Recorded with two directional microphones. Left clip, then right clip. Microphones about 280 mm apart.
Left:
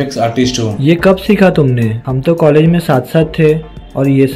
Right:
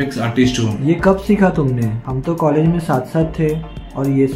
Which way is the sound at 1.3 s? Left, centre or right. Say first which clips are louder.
Left 6 dB; left.